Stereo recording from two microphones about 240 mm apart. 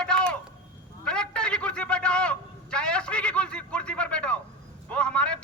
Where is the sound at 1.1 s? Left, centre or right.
Centre.